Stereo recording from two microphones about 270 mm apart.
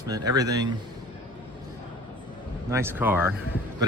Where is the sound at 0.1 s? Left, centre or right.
Centre.